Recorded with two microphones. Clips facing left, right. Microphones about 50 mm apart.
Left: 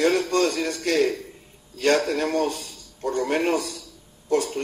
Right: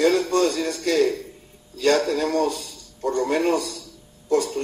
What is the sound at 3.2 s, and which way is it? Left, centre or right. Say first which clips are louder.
Speech: right 1 dB; left.